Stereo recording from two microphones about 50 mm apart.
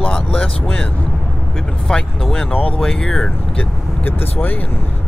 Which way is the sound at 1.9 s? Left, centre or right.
Centre.